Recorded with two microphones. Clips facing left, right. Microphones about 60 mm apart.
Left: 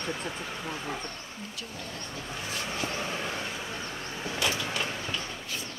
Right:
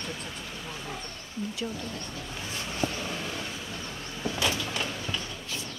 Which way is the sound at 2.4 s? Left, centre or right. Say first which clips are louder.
Right 2 dB; left.